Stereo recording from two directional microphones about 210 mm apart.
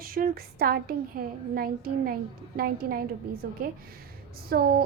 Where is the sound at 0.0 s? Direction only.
45° right (ahead or behind).